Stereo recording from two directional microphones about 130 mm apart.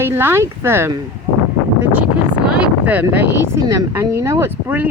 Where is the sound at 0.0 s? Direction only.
20° right (ahead or behind).